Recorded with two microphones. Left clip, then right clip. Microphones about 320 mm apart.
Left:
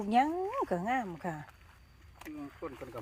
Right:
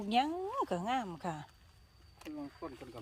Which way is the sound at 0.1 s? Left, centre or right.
Centre.